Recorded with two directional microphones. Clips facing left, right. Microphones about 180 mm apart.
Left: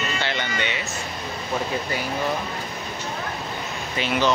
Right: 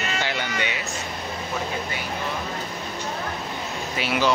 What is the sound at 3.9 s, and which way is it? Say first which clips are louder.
Speech: left 1 dB; 10° right (ahead or behind).